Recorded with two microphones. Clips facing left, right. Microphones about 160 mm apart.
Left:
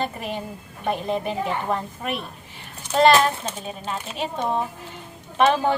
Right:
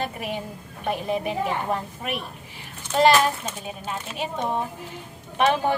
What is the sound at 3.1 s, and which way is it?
Speech, 25° left (ahead or behind).